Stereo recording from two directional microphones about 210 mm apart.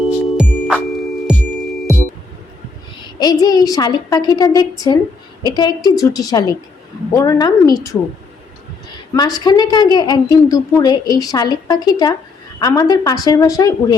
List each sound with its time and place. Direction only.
0.3 s music: centre (ahead or behind)
3.0 s a woman's voice: 20° left (ahead or behind)
9.1 s a woman's voice: 20° left (ahead or behind)